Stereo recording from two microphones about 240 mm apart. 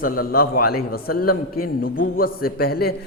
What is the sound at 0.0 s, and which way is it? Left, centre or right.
A man's voice, left.